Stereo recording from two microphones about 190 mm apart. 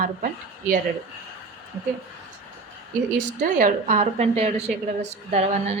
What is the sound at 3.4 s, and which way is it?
A woman's voice, 45° right (ahead or behind).